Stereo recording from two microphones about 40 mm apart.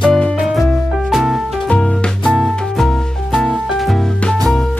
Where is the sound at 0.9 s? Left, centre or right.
Centre.